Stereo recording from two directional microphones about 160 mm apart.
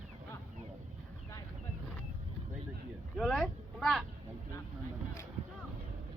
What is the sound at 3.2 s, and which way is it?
Speech, centre (ahead or behind).